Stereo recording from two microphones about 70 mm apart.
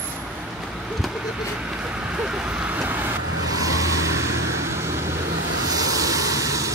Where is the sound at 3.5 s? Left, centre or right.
Right.